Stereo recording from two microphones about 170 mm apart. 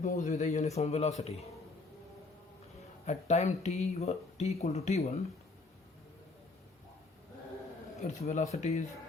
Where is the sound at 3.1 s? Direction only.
40° left (ahead or behind).